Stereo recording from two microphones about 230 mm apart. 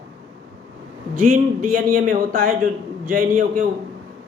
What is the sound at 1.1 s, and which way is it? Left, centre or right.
Speech, right.